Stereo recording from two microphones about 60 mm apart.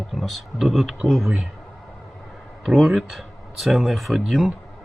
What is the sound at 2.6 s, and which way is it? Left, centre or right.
Speech, centre.